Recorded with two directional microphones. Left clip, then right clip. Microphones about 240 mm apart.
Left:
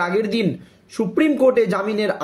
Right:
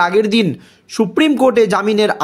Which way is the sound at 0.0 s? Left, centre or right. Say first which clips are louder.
Right 7 dB; right.